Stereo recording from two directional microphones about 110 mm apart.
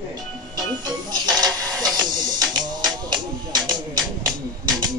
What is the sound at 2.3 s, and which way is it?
Music, 40° right (ahead or behind).